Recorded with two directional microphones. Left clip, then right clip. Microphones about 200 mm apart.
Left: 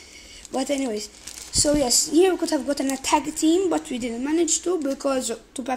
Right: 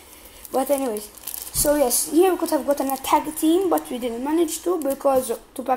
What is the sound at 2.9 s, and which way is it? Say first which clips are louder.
A woman's voice: right 2 dB; 45° left (ahead or behind).